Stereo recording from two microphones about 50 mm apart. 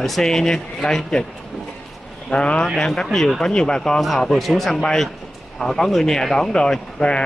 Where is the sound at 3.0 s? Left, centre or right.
Centre.